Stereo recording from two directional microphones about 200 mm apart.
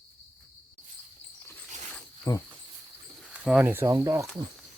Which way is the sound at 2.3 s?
15° left (ahead or behind).